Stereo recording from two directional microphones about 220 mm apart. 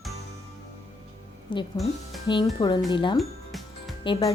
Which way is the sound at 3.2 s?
Centre (ahead or behind).